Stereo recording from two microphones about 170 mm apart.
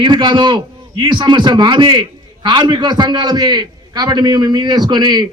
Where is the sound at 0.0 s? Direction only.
25° right (ahead or behind).